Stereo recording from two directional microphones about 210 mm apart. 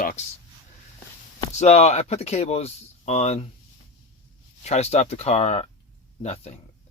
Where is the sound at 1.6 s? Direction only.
30° left (ahead or behind).